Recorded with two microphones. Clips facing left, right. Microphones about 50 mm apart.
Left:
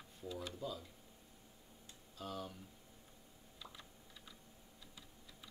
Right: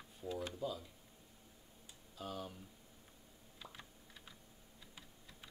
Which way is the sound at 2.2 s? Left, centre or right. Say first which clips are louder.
Even; centre.